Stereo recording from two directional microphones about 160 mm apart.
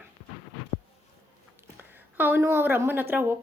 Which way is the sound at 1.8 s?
10° right (ahead or behind).